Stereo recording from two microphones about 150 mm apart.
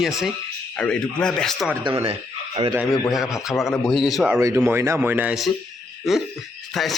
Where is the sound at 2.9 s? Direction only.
25° left (ahead or behind).